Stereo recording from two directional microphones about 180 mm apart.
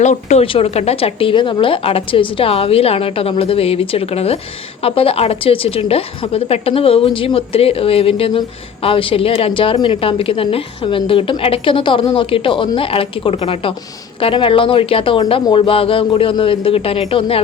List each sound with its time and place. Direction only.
0.0 s a woman's voice: 40° left (ahead or behind)